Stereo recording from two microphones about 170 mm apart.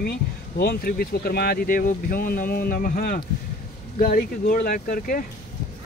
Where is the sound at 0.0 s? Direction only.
70° left (ahead or behind).